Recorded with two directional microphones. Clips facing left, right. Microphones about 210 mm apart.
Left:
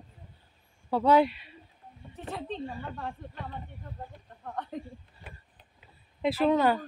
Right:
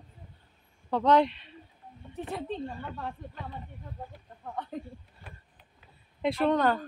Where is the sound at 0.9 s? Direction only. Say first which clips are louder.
Left 1 dB; 5° left (ahead or behind).